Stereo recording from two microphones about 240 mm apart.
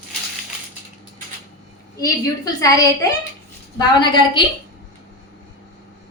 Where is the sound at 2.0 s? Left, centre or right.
Centre.